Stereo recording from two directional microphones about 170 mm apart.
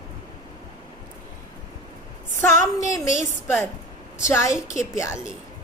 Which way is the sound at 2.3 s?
50° right (ahead or behind).